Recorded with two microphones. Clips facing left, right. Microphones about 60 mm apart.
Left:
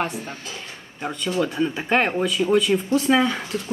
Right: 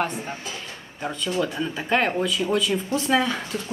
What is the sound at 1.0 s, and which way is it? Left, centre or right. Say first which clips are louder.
Speech: left 2 dB; centre.